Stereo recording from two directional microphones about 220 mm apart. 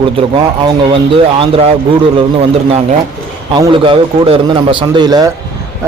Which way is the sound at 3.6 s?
25° right (ahead or behind).